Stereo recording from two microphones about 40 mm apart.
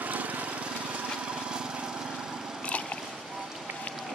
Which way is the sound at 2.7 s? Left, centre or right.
Left.